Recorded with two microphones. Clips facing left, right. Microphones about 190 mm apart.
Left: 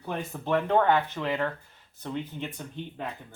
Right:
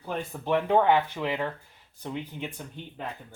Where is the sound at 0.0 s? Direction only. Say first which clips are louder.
Even; 10° right (ahead or behind).